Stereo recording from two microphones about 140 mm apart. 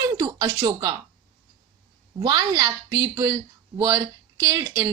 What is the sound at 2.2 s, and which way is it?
A woman's voice, 25° right (ahead or behind).